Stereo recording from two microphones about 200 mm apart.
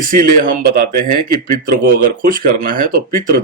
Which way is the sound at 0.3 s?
45° right (ahead or behind).